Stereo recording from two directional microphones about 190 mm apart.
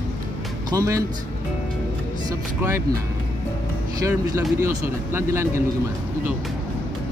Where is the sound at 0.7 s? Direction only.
15° right (ahead or behind).